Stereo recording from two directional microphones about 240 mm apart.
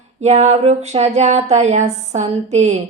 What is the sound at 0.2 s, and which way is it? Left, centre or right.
Speech, right.